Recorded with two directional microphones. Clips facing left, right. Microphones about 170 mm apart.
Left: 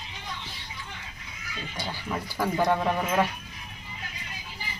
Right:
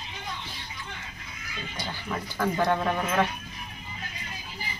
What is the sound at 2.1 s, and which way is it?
Speech, 5° left (ahead or behind).